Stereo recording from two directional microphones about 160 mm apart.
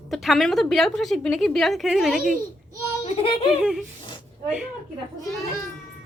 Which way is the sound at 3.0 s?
40° left (ahead or behind).